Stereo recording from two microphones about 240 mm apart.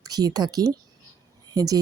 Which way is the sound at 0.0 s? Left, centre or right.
Centre.